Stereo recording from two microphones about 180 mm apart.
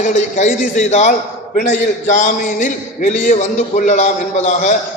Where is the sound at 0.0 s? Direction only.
45° left (ahead or behind).